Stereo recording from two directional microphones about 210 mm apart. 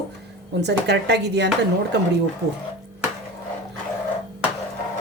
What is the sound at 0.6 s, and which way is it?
Speech, 55° right (ahead or behind).